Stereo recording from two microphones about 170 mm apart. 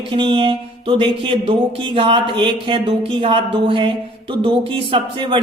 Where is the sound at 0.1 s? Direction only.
30° right (ahead or behind).